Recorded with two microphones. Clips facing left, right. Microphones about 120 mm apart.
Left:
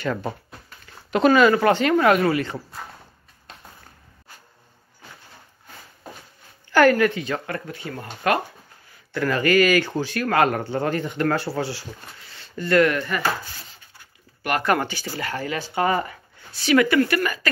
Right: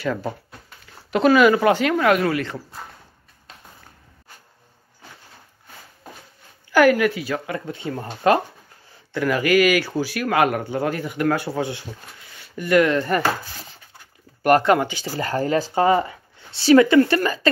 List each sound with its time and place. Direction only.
0.0 s speech: centre (ahead or behind)
6.7 s speech: 10° right (ahead or behind)
7.6 s speech: 25° right (ahead or behind)
9.1 s speech: 10° right (ahead or behind)
12.3 s a sound: 15° right (ahead or behind)
12.9 s speech: 35° right (ahead or behind)
14.6 s speech: 20° right (ahead or behind)
15.1 s speech: 35° right (ahead or behind)
15.8 s speech: 25° right (ahead or behind)